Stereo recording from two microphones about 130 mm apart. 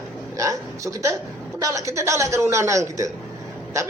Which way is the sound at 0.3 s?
25° right (ahead or behind).